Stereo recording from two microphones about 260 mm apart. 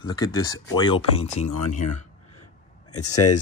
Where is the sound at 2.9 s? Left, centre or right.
Left.